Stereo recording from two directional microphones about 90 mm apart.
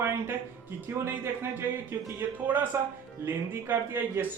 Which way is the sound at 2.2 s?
20° right (ahead or behind).